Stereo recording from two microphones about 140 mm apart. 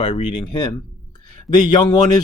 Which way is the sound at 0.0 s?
35° left (ahead or behind).